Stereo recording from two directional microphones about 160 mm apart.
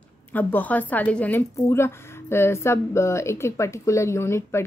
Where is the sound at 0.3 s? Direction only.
10° left (ahead or behind).